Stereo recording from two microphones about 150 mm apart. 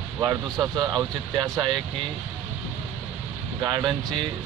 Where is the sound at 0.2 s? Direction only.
25° right (ahead or behind).